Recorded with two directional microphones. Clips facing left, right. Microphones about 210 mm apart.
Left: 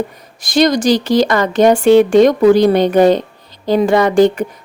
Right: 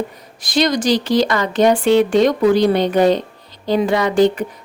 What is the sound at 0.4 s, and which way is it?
Speech, 45° left (ahead or behind).